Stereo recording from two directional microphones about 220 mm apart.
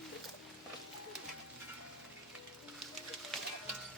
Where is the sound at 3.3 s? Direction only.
Centre (ahead or behind).